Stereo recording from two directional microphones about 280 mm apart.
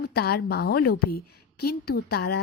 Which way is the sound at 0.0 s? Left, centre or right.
Left.